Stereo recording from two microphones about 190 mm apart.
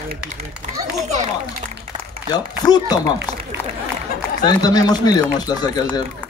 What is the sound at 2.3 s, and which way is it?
Speech, 20° left (ahead or behind).